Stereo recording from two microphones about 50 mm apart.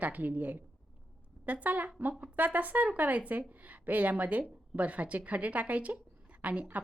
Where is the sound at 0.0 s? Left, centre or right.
Right.